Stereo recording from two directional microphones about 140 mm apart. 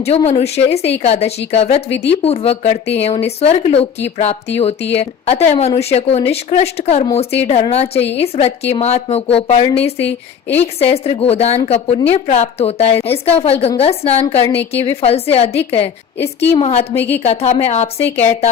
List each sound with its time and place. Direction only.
0.3 s speech: 50° left (ahead or behind)
16.1 s a woman's voice: 15° left (ahead or behind)
16.5 s speech: 45° left (ahead or behind)
16.9 s a woman's voice: 15° left (ahead or behind)
17.2 s speech: 50° left (ahead or behind)